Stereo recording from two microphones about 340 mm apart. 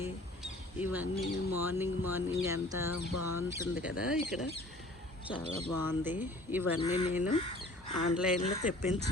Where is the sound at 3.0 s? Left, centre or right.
Left.